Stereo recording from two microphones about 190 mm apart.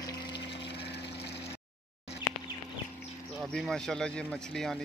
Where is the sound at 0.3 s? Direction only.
60° left (ahead or behind).